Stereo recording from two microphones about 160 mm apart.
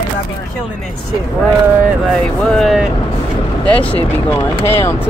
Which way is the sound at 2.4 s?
Centre (ahead or behind).